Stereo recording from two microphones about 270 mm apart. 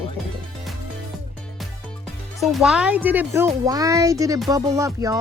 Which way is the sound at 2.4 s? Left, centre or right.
Centre.